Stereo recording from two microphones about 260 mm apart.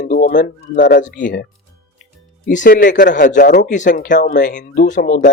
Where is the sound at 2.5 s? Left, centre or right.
Left.